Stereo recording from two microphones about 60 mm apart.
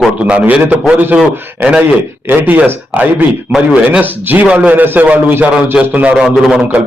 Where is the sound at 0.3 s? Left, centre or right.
Right.